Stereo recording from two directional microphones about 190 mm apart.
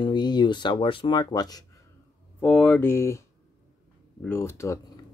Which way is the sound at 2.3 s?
5° left (ahead or behind).